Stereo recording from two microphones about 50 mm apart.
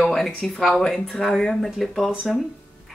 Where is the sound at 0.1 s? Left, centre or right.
Centre.